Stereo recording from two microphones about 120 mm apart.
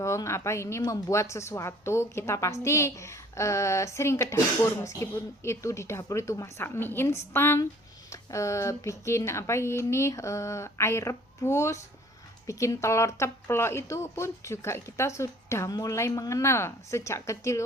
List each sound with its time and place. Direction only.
0.0 s a woman's voice: 25° left (ahead or behind)